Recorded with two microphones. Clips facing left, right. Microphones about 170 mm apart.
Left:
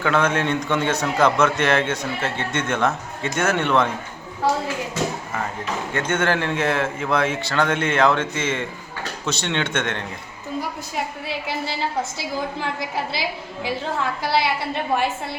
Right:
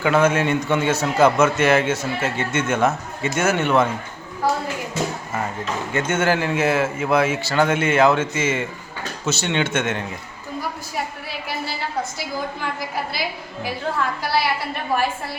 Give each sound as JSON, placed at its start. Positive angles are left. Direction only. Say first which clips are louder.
{"t": 0.0, "sound": "a man's voice", "louder": "right 3 dB", "side_deg": -10}
{"t": 5.9, "sound": "a man's voice", "louder": "right 2 dB", "side_deg": -5}
{"t": 11.4, "sound": "a sound", "louder": "right 1 dB", "side_deg": 25}
{"t": 14.2, "sound": "a woman's voice", "louder": "even", "side_deg": 25}